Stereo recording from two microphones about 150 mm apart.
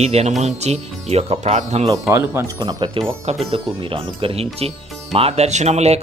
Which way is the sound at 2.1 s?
20° right (ahead or behind).